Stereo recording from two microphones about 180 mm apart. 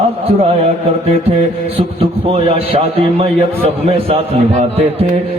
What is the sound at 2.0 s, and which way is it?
A man's voice, 30° right (ahead or behind).